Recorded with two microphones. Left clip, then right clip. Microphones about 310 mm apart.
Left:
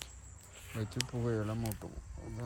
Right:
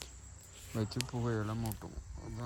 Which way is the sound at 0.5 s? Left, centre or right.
Centre.